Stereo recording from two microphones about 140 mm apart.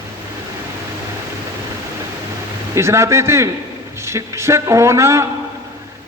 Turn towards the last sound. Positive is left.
turn(degrees=-20)  # may be behind; listen again after turning